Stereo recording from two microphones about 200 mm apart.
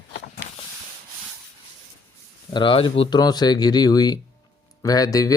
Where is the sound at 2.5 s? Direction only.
25° left (ahead or behind).